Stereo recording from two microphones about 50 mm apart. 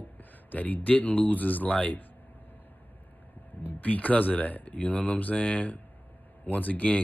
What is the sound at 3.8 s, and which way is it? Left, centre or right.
Speech, left.